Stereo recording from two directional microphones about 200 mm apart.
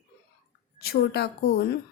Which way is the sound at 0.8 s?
50° left (ahead or behind).